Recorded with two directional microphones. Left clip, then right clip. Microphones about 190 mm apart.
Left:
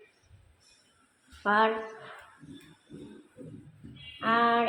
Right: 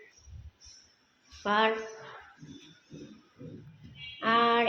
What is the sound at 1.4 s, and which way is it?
Speech, 5° left (ahead or behind).